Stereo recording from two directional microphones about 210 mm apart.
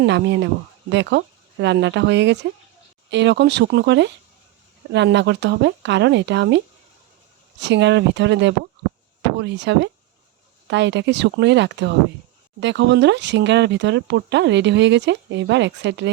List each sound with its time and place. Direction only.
0.0 s speech: 55° right (ahead or behind)
7.6 s speech: 55° right (ahead or behind)